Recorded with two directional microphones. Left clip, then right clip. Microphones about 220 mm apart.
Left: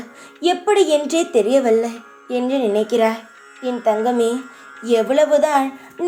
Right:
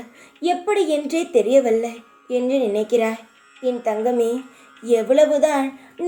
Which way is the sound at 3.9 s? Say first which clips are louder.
Left 2 dB; 25° left (ahead or behind).